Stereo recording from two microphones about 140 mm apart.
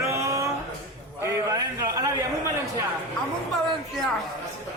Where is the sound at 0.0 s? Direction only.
20° right (ahead or behind).